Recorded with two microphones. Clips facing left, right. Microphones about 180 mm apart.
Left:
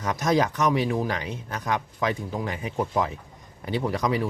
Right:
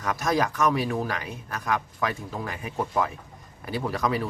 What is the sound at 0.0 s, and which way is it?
A man's voice, 20° left (ahead or behind).